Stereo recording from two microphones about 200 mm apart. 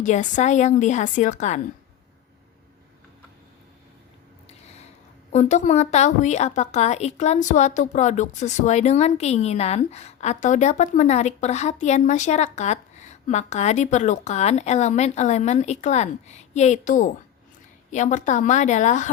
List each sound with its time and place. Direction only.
0.0 s a woman's voice: 35° left (ahead or behind)
5.3 s a woman's voice: 35° left (ahead or behind)